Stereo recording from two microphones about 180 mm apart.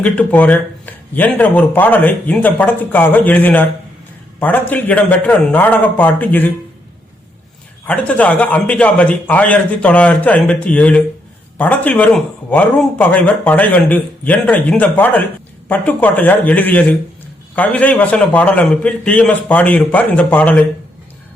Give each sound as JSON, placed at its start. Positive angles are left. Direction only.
{"t": 0.0, "sound": "a man's voice", "side_deg": 10}
{"t": 7.9, "sound": "a man's voice", "side_deg": 5}